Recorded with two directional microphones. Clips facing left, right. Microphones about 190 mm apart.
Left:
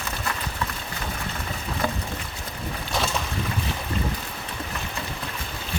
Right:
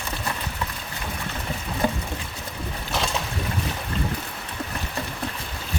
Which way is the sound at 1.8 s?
20° right (ahead or behind).